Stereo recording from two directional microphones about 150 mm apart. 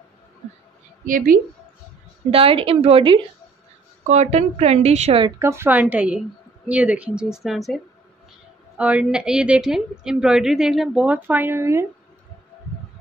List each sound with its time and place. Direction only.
1.0 s a woman's voice: 65° right (ahead or behind)
2.3 s a woman's voice: 40° right (ahead or behind)
4.1 s speech: 50° right (ahead or behind)
5.4 s a woman's voice: 15° right (ahead or behind)